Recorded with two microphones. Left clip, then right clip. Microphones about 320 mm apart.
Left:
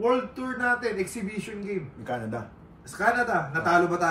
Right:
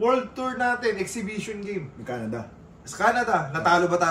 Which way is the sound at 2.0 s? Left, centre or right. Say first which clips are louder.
Even; centre.